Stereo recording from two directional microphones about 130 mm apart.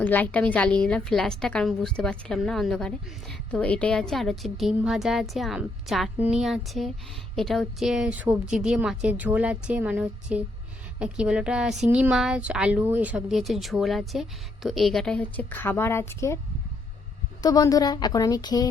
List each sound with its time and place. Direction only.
0.0 s a woman's voice: 15° left (ahead or behind)
17.4 s a woman's voice: 30° left (ahead or behind)